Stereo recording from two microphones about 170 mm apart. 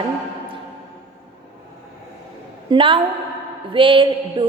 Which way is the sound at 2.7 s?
30° right (ahead or behind).